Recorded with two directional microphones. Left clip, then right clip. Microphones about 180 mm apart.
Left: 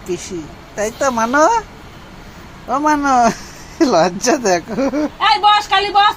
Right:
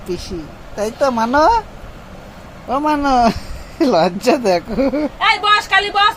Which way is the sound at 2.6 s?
Centre (ahead or behind).